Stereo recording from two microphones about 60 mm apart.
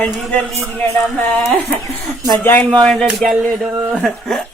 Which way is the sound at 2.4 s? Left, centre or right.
Left.